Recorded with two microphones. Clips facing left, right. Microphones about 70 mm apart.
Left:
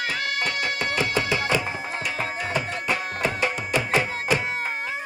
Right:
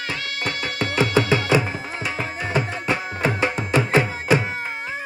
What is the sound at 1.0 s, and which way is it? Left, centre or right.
Music, right.